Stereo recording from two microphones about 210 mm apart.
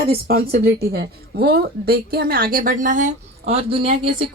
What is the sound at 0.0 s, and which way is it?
A woman's voice, 45° right (ahead or behind).